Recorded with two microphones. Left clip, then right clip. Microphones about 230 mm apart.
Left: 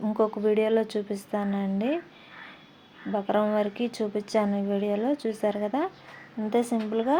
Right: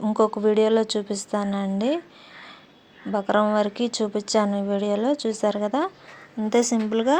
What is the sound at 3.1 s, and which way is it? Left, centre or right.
Speech, centre.